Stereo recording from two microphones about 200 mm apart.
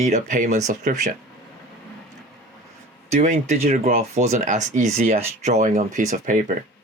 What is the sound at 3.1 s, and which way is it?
Speech, 40° right (ahead or behind).